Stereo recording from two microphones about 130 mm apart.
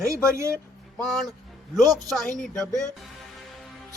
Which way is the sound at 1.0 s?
Centre (ahead or behind).